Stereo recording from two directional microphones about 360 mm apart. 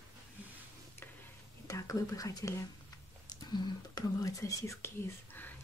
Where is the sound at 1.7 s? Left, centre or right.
Centre.